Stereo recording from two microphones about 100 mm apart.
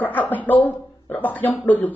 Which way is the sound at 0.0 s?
15° left (ahead or behind).